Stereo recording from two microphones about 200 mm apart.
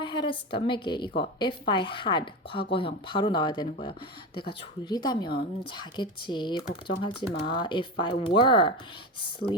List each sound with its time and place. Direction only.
0.0 s a woman's voice: 25° left (ahead or behind)